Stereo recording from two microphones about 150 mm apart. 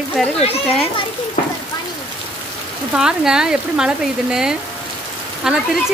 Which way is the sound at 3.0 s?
5° right (ahead or behind).